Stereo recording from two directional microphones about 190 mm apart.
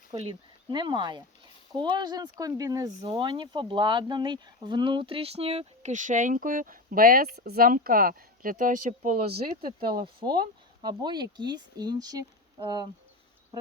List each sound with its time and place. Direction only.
0.1 s speech: 30° right (ahead or behind)
10.2 s speech: 25° right (ahead or behind)